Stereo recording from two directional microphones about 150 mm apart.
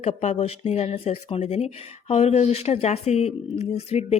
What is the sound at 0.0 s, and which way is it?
Speech, 50° left (ahead or behind).